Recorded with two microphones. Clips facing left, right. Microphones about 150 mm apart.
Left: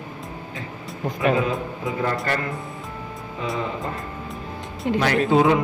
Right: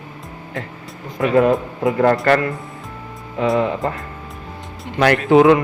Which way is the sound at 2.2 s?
75° right (ahead or behind).